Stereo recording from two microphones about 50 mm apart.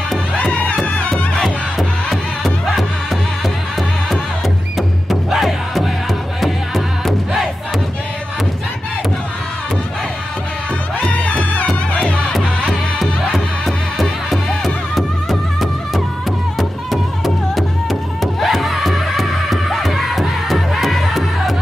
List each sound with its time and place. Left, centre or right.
0.4 s music: centre
1.1 s music: centre
5.3 s music: centre
11.5 s music: left
12.3 s music: centre